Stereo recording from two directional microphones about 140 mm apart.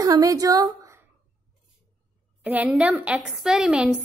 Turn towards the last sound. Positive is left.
turn(degrees=-10)  # may be behind; listen again after turning